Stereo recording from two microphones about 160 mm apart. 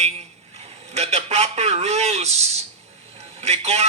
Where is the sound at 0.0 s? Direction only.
40° right (ahead or behind).